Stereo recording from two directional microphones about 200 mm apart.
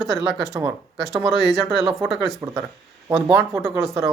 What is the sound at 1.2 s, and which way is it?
Speech, centre (ahead or behind).